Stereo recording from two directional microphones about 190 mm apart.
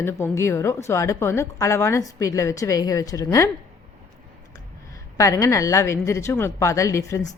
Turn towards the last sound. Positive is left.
turn(degrees=15)  # may be behind; listen again after turning